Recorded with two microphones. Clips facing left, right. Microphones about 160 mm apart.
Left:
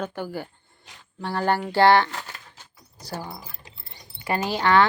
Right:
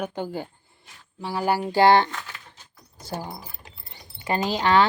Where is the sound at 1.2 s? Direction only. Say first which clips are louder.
Even; 5° right (ahead or behind).